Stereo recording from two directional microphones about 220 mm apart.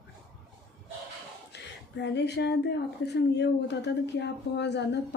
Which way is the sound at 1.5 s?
50° left (ahead or behind).